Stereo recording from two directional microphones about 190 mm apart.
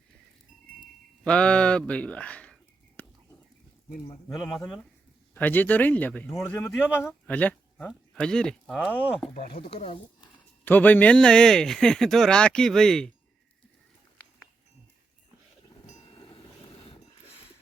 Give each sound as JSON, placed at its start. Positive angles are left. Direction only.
{"t": 1.2, "sound": "speech", "side_deg": 5}
{"t": 3.0, "sound": "whispering", "side_deg": 10}
{"t": 4.3, "sound": "speech", "side_deg": 0}
{"t": 9.5, "sound": "speech", "side_deg": 30}
{"t": 10.7, "sound": "speech", "side_deg": 10}
{"t": 16.0, "sound": "vehicle", "side_deg": 25}